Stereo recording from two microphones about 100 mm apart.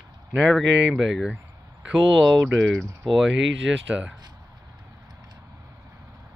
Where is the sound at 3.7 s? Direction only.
10° right (ahead or behind).